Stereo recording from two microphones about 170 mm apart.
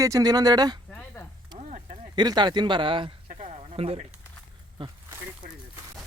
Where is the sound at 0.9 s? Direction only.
10° left (ahead or behind).